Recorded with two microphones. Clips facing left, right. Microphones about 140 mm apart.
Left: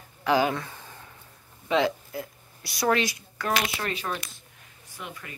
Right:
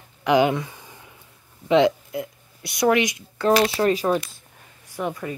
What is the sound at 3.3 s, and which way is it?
Speech, 30° right (ahead or behind).